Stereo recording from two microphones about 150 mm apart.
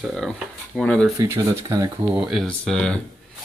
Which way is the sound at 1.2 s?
20° right (ahead or behind).